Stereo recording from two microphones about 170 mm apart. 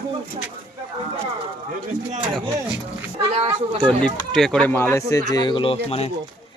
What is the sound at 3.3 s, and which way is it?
Speech, 35° right (ahead or behind).